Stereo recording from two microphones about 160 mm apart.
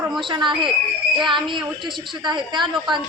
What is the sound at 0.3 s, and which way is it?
A woman's voice, 30° right (ahead or behind).